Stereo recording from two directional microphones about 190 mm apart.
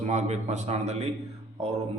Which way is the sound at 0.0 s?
35° right (ahead or behind).